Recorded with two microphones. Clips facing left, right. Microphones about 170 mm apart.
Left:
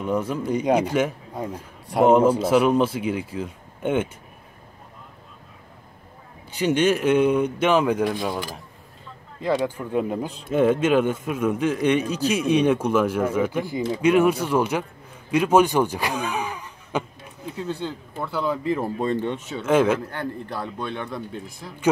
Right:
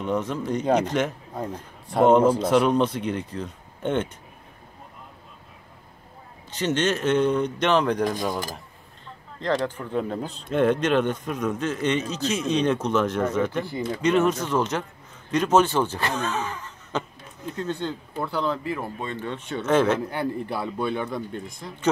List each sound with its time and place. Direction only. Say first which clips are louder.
0.0 s a man's voice: left 2 dB; 10° left (ahead or behind)
6.5 s a man's voice: left 4 dB; 10° left (ahead or behind)
9.4 s a man's voice: left 2 dB; 10° left (ahead or behind)
18.6 s speech: left 5 dB; 20° left (ahead or behind)
18.9 s speech: left 8 dB; 35° left (ahead or behind)
19.3 s a man's voice: right 2 dB; 10° left (ahead or behind)
20.1 s speech: right 3 dB; 10° right (ahead or behind)